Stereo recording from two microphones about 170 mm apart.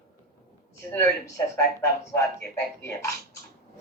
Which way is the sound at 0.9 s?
15° left (ahead or behind).